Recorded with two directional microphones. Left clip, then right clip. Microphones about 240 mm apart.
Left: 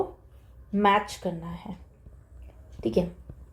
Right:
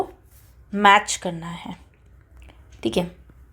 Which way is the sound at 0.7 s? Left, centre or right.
Right.